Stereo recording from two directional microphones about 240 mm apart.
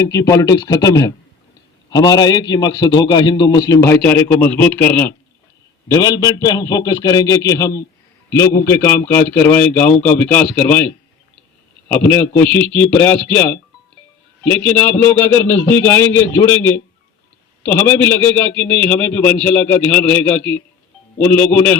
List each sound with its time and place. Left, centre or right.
0.0 s a man's voice: centre